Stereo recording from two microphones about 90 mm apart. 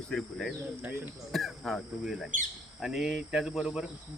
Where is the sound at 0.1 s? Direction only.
5° left (ahead or behind).